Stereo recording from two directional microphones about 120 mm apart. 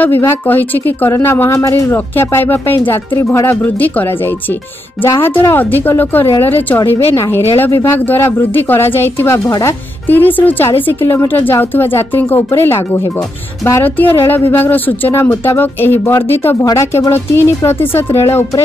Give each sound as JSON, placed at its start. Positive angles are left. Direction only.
{"t": 0.0, "sound": "speech", "side_deg": 20}
{"t": 5.0, "sound": "speech", "side_deg": 20}
{"t": 10.0, "sound": "speech", "side_deg": 15}